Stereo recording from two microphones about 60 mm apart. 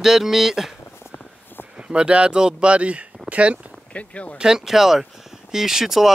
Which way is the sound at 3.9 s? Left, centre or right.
Left.